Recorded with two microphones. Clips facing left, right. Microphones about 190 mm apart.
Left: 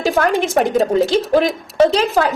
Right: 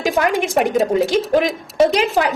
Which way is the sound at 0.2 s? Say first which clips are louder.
Left 1 dB; 15° right (ahead or behind).